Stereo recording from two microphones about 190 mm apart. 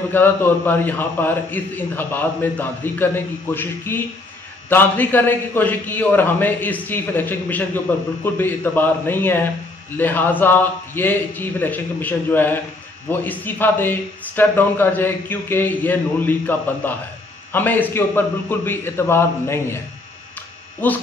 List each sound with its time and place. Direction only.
0.1 s a man's voice: 10° left (ahead or behind)
20.8 s a man's voice: 10° left (ahead or behind)